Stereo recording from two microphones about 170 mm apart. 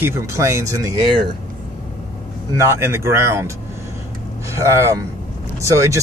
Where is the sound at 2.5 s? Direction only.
15° right (ahead or behind).